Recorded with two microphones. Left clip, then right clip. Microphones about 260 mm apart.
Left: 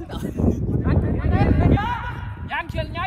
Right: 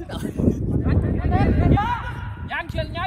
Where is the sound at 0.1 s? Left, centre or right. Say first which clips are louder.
Right 1 dB; right.